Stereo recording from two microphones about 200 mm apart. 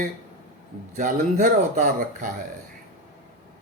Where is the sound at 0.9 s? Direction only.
40° right (ahead or behind).